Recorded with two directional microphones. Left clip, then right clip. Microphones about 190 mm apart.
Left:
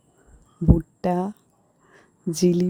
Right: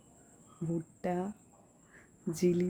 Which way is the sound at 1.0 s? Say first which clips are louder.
Left 11 dB; 45° left (ahead or behind).